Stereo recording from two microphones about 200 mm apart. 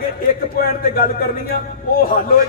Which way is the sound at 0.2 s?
50° left (ahead or behind).